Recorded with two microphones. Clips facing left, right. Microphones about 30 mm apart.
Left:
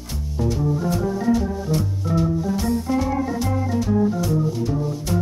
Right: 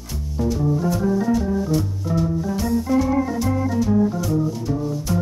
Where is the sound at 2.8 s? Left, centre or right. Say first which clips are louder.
Right 3 dB; centre.